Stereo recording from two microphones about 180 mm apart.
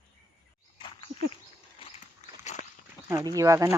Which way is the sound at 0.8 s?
30° left (ahead or behind).